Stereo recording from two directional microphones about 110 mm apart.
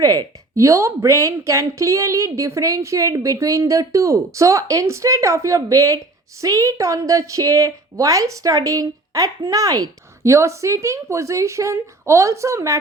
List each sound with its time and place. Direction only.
0.0 s a woman's voice: 35° right (ahead or behind)